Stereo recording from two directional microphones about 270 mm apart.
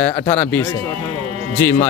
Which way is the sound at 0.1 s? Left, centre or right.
Left.